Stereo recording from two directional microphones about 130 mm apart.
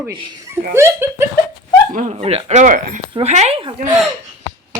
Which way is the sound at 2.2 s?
60° right (ahead or behind).